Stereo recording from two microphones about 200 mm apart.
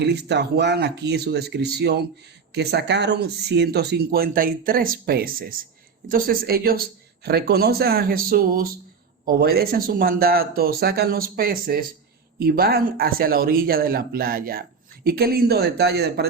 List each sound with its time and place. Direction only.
0.0 s speech: 55° right (ahead or behind)